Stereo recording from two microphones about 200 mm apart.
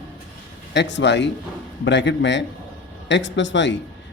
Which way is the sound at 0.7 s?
60° left (ahead or behind).